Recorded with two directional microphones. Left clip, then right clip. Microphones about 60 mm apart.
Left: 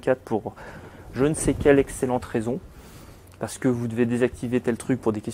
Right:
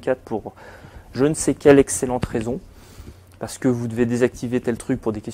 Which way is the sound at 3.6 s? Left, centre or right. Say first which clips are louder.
Right 3 dB; right.